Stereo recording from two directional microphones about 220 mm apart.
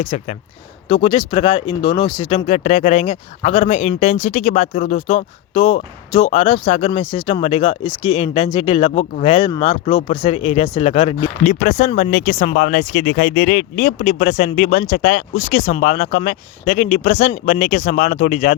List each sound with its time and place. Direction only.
0.1 s speech: 30° left (ahead or behind)